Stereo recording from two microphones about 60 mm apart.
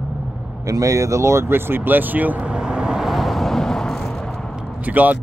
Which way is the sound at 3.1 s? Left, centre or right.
Centre.